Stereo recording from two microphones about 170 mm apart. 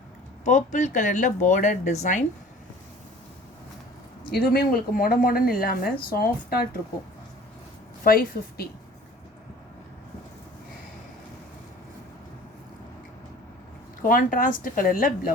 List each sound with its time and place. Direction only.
0.4 s speech: 45° left (ahead or behind)
4.3 s speech: 65° left (ahead or behind)
8.0 s speech: 60° left (ahead or behind)
14.0 s speech: 55° left (ahead or behind)